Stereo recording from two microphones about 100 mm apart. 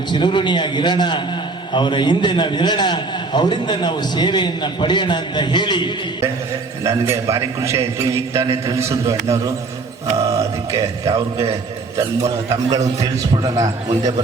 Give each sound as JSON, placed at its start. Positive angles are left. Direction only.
{"t": 0.1, "sound": "a man's voice", "side_deg": 55}
{"t": 6.8, "sound": "a man's voice", "side_deg": -30}
{"t": 10.2, "sound": "mantra", "side_deg": -30}
{"t": 13.4, "sound": "a man's voice", "side_deg": -40}